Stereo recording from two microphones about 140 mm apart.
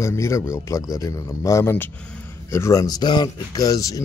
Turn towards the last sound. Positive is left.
turn(degrees=25)  # may be behind; listen again after turning